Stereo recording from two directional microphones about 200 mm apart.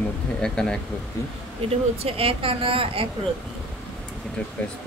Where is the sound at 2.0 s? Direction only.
30° right (ahead or behind).